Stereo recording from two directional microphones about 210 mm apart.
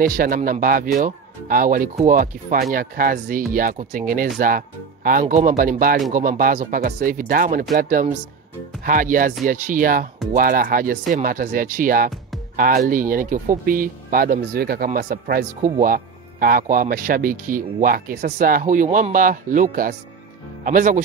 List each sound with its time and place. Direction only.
0.0 s speech: 40° right (ahead or behind)